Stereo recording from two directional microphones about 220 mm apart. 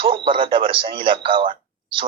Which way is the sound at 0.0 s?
25° right (ahead or behind).